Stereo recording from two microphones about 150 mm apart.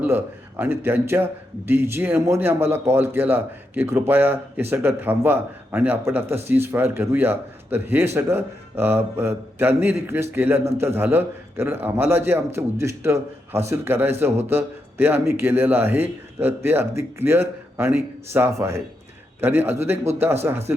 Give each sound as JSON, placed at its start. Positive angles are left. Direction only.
{"t": 0.6, "sound": "a man's voice", "side_deg": -15}